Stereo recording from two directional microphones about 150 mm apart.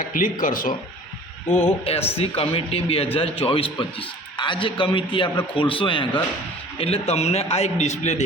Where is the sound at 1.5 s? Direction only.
40° left (ahead or behind).